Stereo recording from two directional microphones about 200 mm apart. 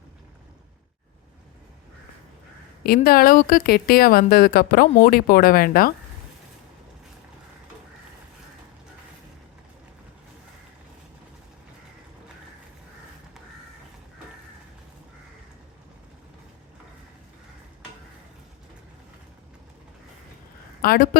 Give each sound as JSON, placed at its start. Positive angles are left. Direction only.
{"t": 2.8, "sound": "speech", "side_deg": 50}
{"t": 20.8, "sound": "speech", "side_deg": 45}